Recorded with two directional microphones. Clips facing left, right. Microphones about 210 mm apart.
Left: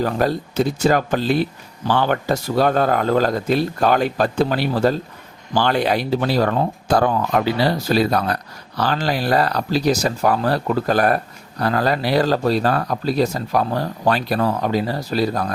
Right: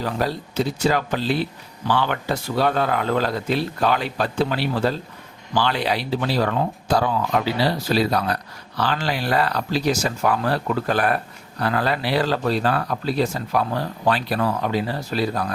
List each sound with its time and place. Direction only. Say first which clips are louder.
0.0 s speech: left 5 dB; 50° left (ahead or behind)